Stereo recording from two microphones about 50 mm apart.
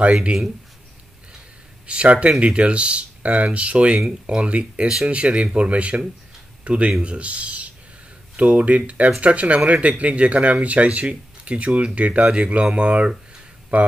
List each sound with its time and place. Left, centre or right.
0.0 s speech: right
1.9 s speech: right